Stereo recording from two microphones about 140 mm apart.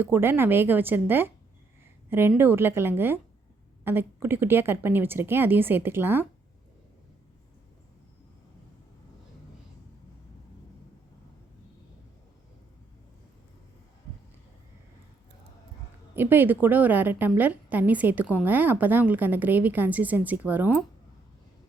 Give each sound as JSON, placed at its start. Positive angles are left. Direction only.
{"t": 0.0, "sound": "a woman's voice", "side_deg": -15}
{"t": 16.1, "sound": "a woman's voice", "side_deg": -15}